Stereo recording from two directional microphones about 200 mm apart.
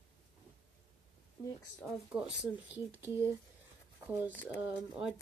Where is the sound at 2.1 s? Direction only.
5° right (ahead or behind).